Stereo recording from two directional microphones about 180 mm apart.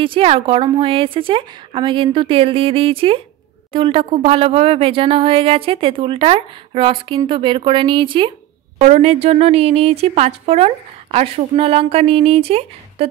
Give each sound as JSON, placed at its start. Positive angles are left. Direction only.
{"t": 0.0, "sound": "a woman's voice", "side_deg": -30}